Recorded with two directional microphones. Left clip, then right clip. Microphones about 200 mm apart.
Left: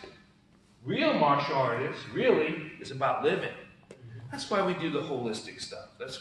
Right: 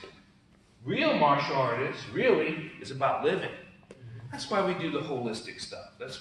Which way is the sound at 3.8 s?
20° left (ahead or behind).